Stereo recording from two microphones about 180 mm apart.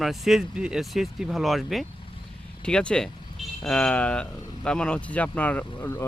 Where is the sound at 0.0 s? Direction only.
Centre (ahead or behind).